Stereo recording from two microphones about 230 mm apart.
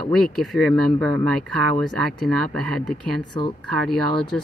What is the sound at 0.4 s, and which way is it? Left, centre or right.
Speech, centre.